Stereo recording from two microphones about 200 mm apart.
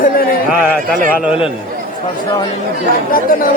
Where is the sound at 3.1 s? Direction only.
45° left (ahead or behind).